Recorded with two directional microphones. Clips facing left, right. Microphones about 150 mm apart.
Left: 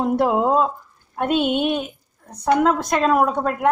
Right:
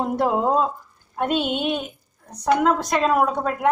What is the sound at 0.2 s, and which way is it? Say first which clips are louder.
A woman's voice: even; 5° left (ahead or behind).